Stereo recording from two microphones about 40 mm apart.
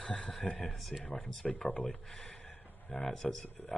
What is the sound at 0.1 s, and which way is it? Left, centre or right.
Speech, left.